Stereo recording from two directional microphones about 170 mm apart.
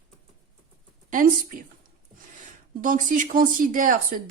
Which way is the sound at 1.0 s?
55° right (ahead or behind).